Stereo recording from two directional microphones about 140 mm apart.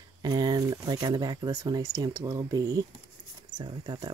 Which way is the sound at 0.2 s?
30° right (ahead or behind).